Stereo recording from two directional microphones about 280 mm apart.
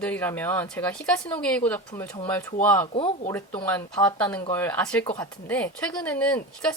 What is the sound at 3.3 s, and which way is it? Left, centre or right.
A woman's voice, centre.